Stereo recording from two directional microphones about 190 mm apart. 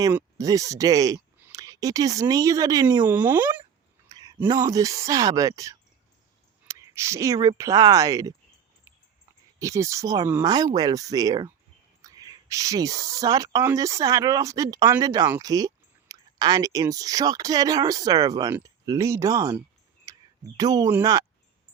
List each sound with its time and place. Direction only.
0.0 s speech: 15° right (ahead or behind)
4.1 s speech: 20° right (ahead or behind)
9.6 s speech: 15° right (ahead or behind)
20.6 s speech: 20° right (ahead or behind)